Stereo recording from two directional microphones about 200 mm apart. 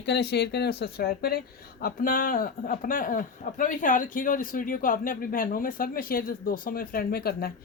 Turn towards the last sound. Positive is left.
turn(degrees=50)  # may be behind; listen again after turning